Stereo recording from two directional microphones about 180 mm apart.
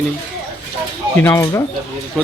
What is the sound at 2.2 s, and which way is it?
Speech, centre (ahead or behind).